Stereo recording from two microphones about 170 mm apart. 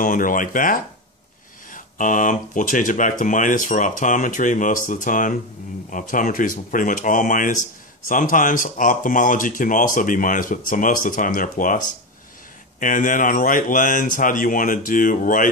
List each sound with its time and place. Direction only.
0.0 s speech: 55° left (ahead or behind)
12.8 s speech: 50° left (ahead or behind)